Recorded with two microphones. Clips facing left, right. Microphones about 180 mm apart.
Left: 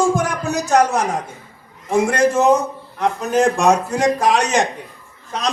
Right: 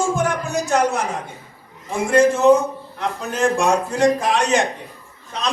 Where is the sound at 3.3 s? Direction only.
40° left (ahead or behind).